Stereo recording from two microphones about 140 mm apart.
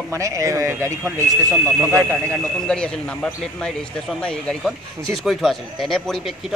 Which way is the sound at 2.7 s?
5° left (ahead or behind).